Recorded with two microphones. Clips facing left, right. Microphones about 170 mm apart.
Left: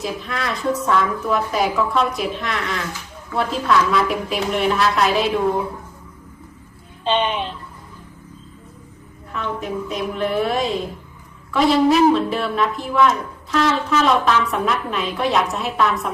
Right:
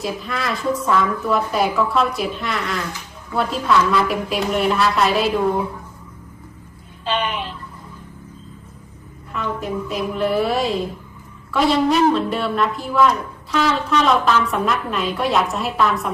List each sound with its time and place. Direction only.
0.0 s a woman's voice: centre (ahead or behind)
7.0 s speech: 25° left (ahead or behind)
9.3 s a woman's voice: centre (ahead or behind)